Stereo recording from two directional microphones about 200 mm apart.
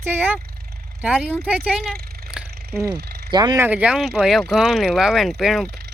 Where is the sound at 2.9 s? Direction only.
55° right (ahead or behind).